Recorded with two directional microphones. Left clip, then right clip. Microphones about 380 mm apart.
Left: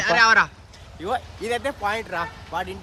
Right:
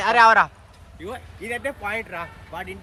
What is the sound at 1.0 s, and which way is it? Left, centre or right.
Speech, centre.